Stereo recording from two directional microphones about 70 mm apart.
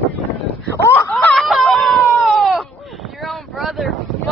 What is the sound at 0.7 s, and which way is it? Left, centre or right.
Speech, left.